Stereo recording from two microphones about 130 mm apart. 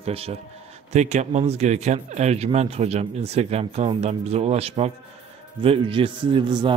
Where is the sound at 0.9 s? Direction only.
65° right (ahead or behind).